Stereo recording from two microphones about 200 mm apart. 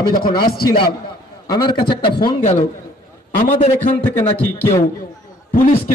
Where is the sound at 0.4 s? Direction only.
50° left (ahead or behind).